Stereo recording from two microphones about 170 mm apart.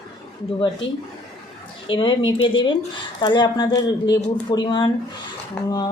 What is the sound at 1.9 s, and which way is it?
Speech, 30° left (ahead or behind).